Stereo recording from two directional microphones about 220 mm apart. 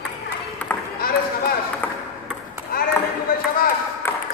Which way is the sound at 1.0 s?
40° left (ahead or behind).